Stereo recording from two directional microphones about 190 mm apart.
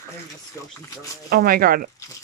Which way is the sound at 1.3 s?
50° right (ahead or behind).